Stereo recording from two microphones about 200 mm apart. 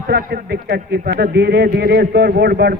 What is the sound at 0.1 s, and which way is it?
A man's voice, 50° right (ahead or behind).